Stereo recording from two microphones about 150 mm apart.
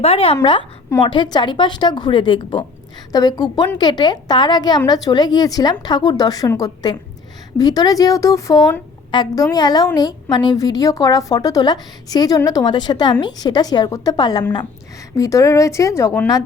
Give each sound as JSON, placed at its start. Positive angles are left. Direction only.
{"t": 0.0, "sound": "a woman's voice", "side_deg": 40}
{"t": 1.0, "sound": "a woman's voice", "side_deg": 30}